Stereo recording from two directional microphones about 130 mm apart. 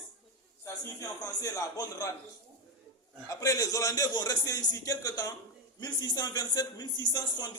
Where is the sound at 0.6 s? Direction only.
25° left (ahead or behind).